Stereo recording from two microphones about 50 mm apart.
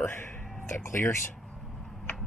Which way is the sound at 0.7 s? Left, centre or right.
Left.